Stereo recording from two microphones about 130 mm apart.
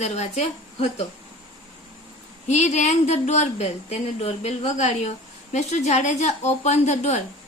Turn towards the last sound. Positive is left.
turn(degrees=60)  # may be behind; listen again after turning